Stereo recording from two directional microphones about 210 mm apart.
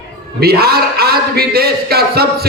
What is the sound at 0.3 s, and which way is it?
A man's voice, 50° right (ahead or behind).